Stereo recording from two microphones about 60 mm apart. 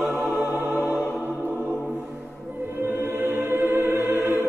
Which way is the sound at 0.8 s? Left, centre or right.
Left.